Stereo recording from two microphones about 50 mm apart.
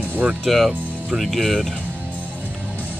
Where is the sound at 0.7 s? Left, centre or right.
Right.